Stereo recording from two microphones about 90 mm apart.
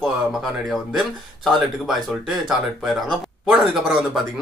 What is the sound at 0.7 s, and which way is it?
Speech, centre (ahead or behind).